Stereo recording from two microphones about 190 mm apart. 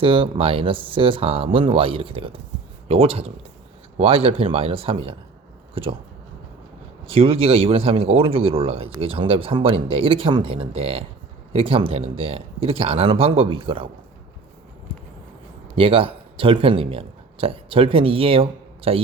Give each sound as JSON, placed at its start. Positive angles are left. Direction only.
{"t": 0.0, "sound": "a man's voice", "side_deg": -30}
{"t": 7.1, "sound": "a man's voice", "side_deg": -30}
{"t": 15.7, "sound": "speech", "side_deg": -30}